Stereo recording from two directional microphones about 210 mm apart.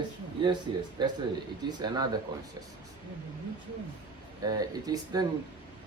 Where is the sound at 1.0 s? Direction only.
20° right (ahead or behind).